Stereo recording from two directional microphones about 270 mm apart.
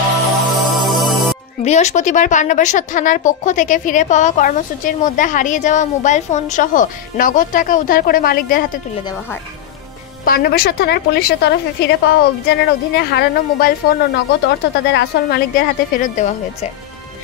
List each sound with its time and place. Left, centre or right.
0.5 s music: centre
1.6 s a woman's voice: left
10.2 s speech: left